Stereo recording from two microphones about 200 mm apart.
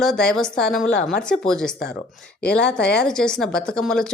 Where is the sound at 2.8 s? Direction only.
55° left (ahead or behind).